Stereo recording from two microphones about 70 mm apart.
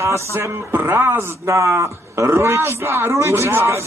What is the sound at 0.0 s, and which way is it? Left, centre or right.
Speech, right.